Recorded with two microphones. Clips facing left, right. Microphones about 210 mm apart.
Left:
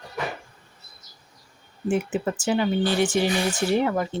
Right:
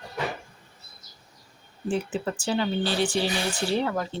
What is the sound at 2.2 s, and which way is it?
Speech, 10° left (ahead or behind).